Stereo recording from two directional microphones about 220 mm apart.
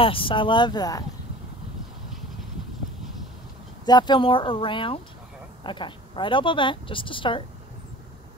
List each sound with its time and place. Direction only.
0.0 s speech: 25° left (ahead or behind)
3.8 s speech: 20° left (ahead or behind)